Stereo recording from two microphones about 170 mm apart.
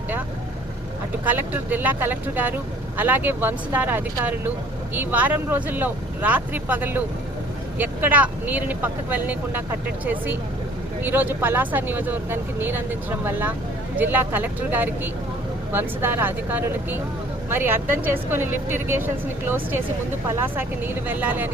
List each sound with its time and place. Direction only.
1.2 s speech: 10° right (ahead or behind)
11.0 s speech: 10° right (ahead or behind)